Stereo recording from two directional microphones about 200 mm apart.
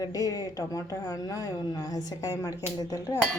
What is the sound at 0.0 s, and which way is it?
Speech, 20° left (ahead or behind).